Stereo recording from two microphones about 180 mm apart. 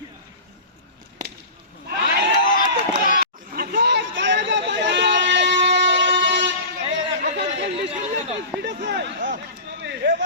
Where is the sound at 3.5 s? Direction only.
55° right (ahead or behind); by 6.6 s 75° right (ahead or behind).